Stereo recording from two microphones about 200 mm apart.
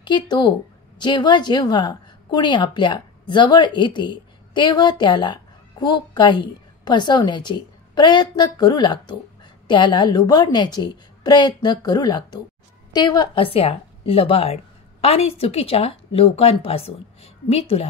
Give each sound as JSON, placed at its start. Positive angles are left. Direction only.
{"t": 0.0, "sound": "a woman's voice", "side_deg": 25}